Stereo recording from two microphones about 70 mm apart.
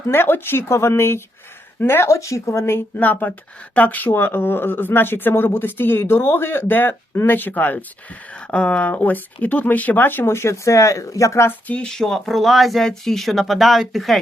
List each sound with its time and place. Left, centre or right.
0.1 s speech: left
2.0 s speech: left
11.7 s speech: centre